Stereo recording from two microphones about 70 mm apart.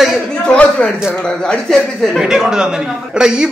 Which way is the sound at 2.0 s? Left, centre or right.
Centre.